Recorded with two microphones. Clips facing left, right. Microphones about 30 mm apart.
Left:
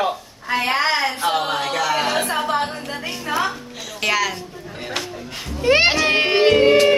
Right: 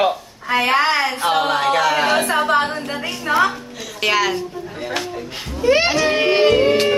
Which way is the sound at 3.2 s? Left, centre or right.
Right.